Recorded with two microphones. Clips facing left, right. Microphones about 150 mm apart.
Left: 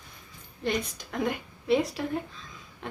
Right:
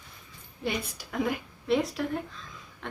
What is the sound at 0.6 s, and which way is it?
A woman's voice, 5° right (ahead or behind).